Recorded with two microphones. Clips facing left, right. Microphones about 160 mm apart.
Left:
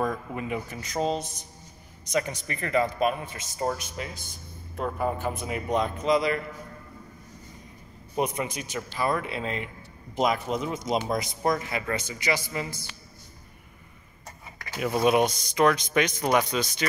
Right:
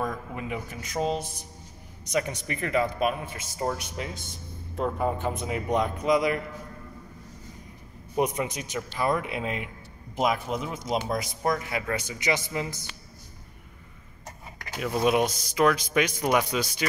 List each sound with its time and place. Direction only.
0.0 s a man's voice: centre (ahead or behind)
3.7 s a man's voice: 20° right (ahead or behind)
4.9 s a man's voice: 5° left (ahead or behind)
5.2 s speech: 20° right (ahead or behind)
8.2 s a man's voice: 20° right (ahead or behind)
14.8 s a man's voice: 5° left (ahead or behind)